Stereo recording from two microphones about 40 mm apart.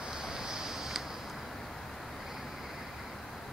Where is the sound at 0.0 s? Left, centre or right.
Centre.